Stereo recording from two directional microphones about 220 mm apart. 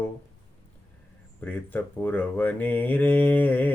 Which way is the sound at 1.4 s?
10° left (ahead or behind).